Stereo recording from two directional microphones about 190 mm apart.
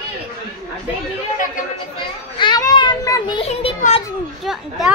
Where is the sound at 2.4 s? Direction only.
20° left (ahead or behind).